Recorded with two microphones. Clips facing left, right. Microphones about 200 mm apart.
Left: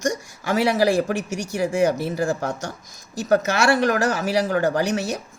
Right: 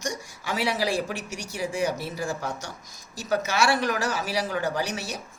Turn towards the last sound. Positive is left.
turn(degrees=45)  # may be behind; listen again after turning